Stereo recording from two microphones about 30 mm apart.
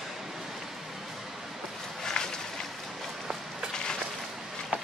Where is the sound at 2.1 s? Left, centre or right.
Left.